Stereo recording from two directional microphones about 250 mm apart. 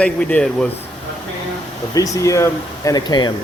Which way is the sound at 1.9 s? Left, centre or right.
Centre.